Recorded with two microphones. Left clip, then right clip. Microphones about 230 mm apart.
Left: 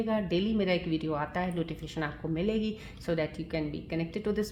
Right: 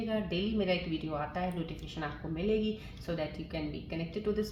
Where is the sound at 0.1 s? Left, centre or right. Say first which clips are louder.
Left 3 dB; left.